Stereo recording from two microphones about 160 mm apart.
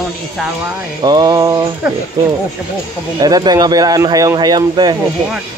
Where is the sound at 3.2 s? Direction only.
25° right (ahead or behind).